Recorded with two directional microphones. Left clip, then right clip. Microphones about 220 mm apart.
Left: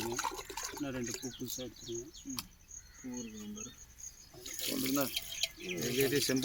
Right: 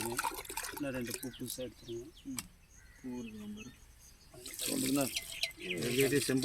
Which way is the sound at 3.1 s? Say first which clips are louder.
Left 1 dB; 45° right (ahead or behind).